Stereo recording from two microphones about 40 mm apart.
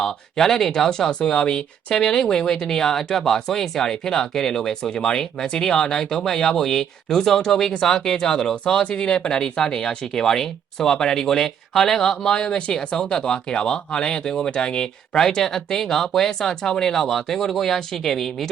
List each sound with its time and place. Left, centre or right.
0.0 s speech: centre
8.8 s speech: left; by 12.3 s centre
12.3 s speech: left; by 18.4 s centre